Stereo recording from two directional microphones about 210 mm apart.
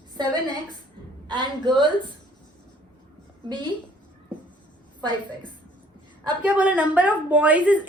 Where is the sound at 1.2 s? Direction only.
20° right (ahead or behind).